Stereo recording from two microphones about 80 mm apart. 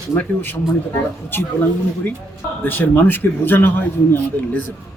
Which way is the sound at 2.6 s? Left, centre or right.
Left.